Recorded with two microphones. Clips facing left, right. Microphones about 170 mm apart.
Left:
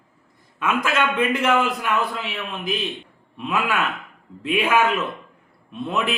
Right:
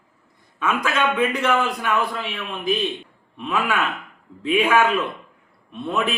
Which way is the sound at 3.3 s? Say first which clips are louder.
Even; 5° left (ahead or behind).